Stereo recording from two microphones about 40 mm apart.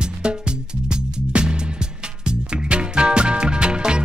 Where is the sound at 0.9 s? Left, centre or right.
Right.